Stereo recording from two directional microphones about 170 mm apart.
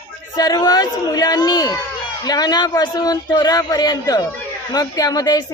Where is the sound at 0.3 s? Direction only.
25° left (ahead or behind).